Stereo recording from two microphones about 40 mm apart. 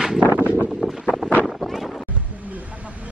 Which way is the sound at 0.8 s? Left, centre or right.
Centre.